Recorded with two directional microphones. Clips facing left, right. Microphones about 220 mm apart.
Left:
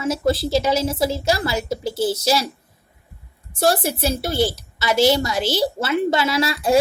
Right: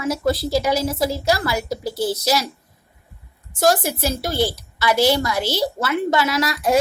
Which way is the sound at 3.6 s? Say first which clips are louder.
Right 1 dB; 30° left (ahead or behind).